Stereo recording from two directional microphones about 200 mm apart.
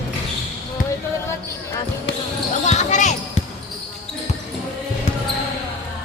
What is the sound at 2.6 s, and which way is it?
Basketball bounce, 35° left (ahead or behind).